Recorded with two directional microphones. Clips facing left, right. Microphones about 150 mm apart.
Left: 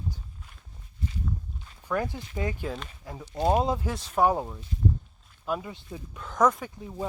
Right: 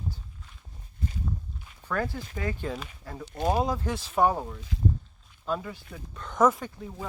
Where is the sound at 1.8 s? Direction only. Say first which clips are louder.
Left 1 dB; 15° left (ahead or behind).